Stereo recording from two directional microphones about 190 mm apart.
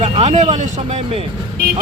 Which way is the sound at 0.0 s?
30° right (ahead or behind).